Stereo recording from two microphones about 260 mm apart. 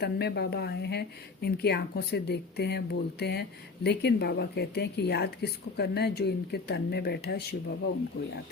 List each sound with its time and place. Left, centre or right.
0.0 s a woman's voice: left